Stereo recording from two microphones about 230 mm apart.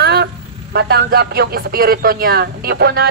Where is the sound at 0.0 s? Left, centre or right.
Right.